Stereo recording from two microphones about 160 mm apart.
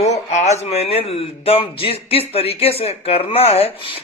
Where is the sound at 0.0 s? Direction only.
45° left (ahead or behind).